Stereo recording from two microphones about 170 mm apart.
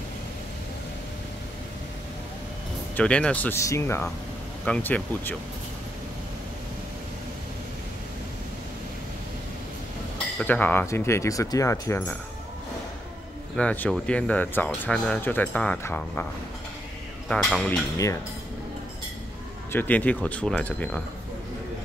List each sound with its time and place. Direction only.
3.0 s speech: 5° left (ahead or behind)
3.5 s speech: 15° left (ahead or behind)
10.1 s speech: 10° left (ahead or behind)
13.6 s speech: 5° left (ahead or behind)
17.3 s speech: centre (ahead or behind)
17.9 s cutlery: 20° left (ahead or behind)
19.7 s speech: 10° left (ahead or behind)